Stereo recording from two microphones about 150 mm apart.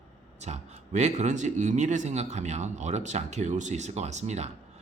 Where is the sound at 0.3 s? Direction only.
50° right (ahead or behind).